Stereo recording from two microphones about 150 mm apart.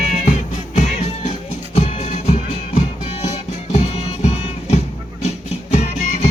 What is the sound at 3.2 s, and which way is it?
Music, 45° left (ahead or behind).